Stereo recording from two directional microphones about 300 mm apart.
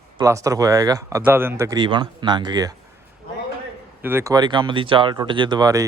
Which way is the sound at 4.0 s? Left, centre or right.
Centre.